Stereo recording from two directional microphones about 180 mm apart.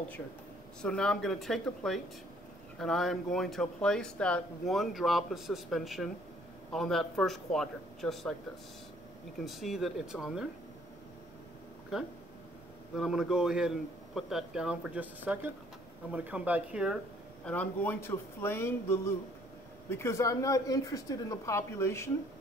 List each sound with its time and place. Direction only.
0.8 s speech: 5° left (ahead or behind)
9.4 s speech: centre (ahead or behind)
12.9 s speech: centre (ahead or behind)
17.5 s a woman's voice: 10° left (ahead or behind)